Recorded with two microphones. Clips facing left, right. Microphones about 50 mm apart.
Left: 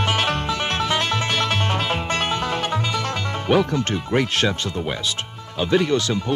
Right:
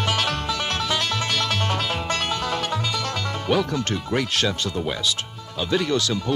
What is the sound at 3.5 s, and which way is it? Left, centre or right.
Speech, left.